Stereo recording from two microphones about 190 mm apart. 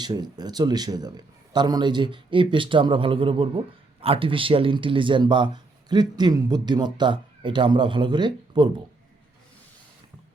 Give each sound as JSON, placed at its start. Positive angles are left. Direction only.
{"t": 0.0, "sound": "a man's voice", "side_deg": -20}